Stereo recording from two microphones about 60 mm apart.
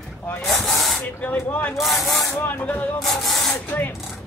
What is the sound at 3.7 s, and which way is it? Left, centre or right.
Speech, left.